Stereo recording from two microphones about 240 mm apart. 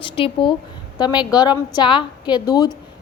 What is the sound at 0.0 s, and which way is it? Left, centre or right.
A woman's voice, left.